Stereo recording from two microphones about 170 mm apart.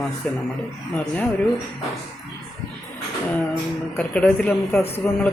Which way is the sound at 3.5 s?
10° left (ahead or behind).